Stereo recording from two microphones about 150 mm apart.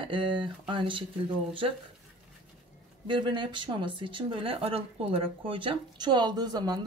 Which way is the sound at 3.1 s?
35° right (ahead or behind).